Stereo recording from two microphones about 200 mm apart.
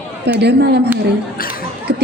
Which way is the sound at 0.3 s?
55° right (ahead or behind).